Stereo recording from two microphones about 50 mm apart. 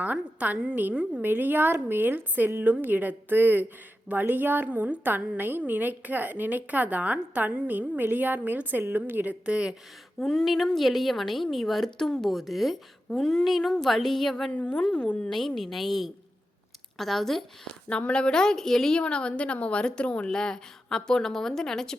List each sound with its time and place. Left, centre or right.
0.0 s a woman's voice: right
1.2 s a woman's voice: right
9.5 s speech: centre
10.2 s a woman's voice: centre
14.5 s a woman's voice: left
15.3 s a woman's voice: centre
17.8 s a woman's voice: left